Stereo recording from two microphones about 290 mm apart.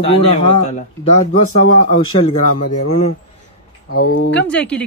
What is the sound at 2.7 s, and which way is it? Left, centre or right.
Speech, left.